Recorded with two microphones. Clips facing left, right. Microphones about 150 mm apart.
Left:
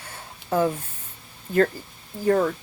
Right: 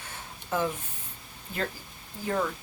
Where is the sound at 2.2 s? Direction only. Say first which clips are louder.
Left 9 dB; 45° left (ahead or behind).